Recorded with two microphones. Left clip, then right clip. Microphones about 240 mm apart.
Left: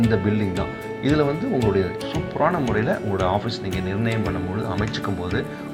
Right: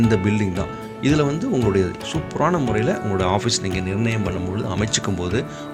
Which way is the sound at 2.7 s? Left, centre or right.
Right.